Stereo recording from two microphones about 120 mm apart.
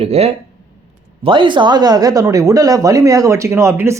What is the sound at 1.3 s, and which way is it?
Speech, 40° right (ahead or behind).